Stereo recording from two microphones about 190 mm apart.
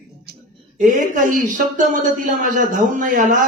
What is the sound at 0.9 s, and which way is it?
A man's voice, 45° right (ahead or behind).